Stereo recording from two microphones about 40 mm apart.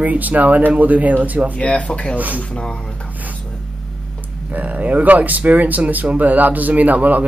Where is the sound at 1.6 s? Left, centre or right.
Left.